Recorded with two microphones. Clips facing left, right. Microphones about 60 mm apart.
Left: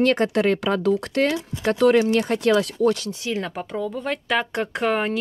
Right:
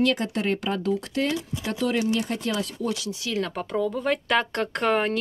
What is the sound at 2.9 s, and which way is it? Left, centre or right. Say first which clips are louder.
Speech: left 4 dB; left.